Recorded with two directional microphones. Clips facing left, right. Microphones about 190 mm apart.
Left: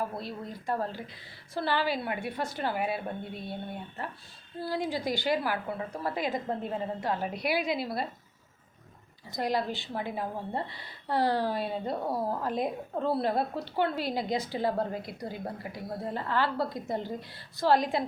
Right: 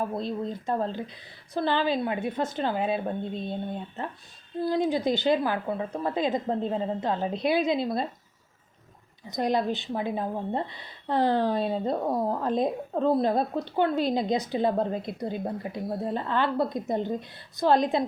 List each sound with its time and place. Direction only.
0.0 s a woman's voice: 20° right (ahead or behind)
9.3 s a woman's voice: 20° right (ahead or behind)